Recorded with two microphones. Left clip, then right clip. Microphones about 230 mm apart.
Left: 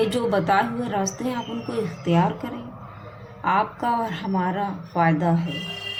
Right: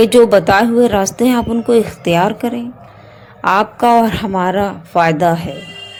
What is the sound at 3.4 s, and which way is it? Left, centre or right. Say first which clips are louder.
Speech: right 9 dB; right.